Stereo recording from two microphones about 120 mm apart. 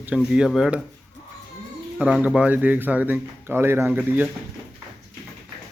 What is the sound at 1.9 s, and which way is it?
Speech, 5° right (ahead or behind).